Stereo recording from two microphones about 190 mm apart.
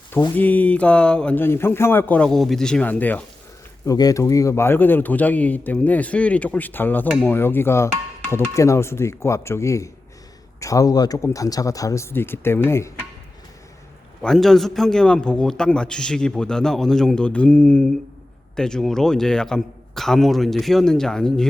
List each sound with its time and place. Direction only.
0.3 s speech: 10° left (ahead or behind)
14.2 s a man's voice: centre (ahead or behind)